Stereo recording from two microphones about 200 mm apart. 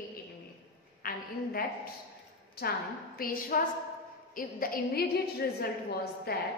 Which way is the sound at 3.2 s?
45° left (ahead or behind).